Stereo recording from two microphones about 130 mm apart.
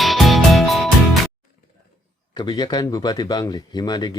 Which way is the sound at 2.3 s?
35° left (ahead or behind).